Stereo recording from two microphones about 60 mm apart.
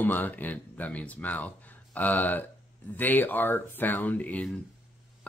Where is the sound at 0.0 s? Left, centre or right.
Left.